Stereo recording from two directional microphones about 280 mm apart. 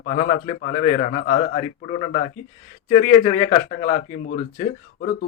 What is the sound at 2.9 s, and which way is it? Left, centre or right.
A man's voice, left.